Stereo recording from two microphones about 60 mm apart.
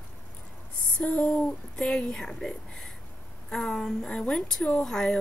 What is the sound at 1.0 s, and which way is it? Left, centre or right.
A woman's voice, centre.